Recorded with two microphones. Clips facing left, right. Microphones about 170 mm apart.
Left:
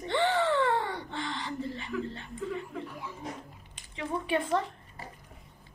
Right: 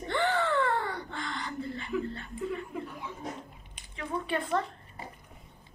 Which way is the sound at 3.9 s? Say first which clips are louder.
Left 2 dB; 20° left (ahead or behind).